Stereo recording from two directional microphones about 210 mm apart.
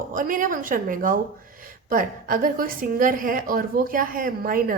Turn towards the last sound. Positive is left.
turn(degrees=-40)  # may be behind; listen again after turning